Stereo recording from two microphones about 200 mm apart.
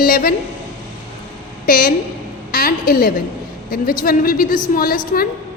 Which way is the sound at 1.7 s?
45° left (ahead or behind).